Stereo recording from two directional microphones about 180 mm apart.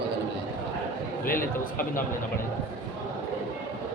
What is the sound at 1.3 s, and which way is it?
Speech, 50° left (ahead or behind).